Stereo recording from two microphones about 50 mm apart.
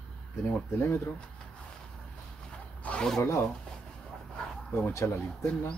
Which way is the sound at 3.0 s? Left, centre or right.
Centre.